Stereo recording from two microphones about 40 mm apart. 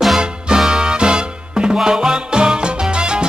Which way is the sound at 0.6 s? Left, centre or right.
Centre.